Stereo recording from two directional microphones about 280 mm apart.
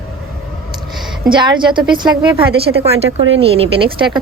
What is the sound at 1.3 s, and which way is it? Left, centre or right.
A woman's voice, centre.